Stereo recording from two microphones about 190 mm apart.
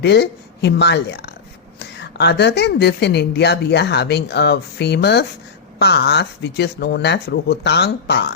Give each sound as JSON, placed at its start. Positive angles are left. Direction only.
{"t": 0.0, "sound": "a woman's voice", "side_deg": 65}